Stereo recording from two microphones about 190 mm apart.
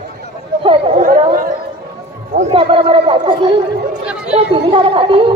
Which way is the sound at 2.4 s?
30° right (ahead or behind).